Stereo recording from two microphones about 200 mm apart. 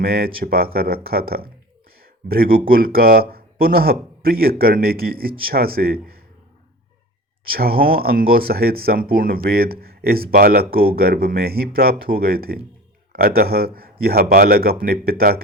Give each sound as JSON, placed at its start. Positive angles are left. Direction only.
{"t": 0.0, "sound": "speech", "side_deg": -50}
{"t": 7.5, "sound": "speech", "side_deg": -45}